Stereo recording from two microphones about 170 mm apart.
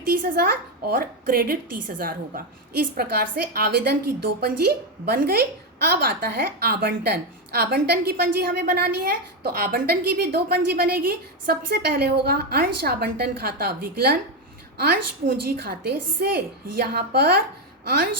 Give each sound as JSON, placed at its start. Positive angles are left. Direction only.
{"t": 0.0, "sound": "speech", "side_deg": -60}
{"t": 5.0, "sound": "a woman's voice", "side_deg": -65}